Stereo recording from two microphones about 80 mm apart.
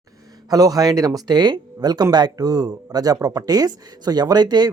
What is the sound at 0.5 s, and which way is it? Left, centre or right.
Speech, right.